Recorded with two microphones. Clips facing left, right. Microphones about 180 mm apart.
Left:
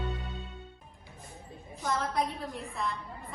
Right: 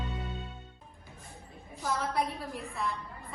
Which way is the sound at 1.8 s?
Centre (ahead or behind).